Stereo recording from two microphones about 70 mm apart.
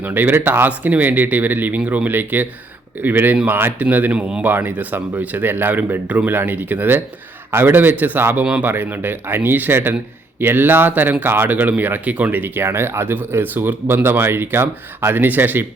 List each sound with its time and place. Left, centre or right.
0.0 s speech: right
1.8 s speech: centre
2.0 s speech: right
4.4 s speech: right